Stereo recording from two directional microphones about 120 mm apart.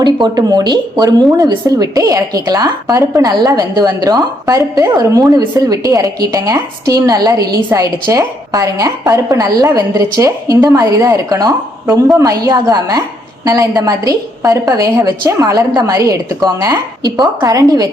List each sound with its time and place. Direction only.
0.0 s a woman's voice: 35° right (ahead or behind)